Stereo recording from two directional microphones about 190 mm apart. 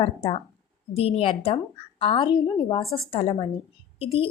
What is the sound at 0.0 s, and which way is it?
A woman's voice, 30° left (ahead or behind).